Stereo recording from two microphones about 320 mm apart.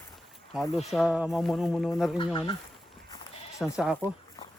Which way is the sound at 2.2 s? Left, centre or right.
Centre.